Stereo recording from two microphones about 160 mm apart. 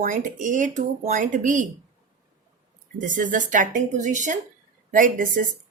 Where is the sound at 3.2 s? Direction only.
55° right (ahead or behind).